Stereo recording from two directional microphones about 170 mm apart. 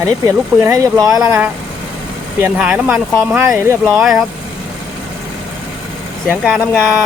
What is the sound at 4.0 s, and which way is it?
Speech, centre (ahead or behind).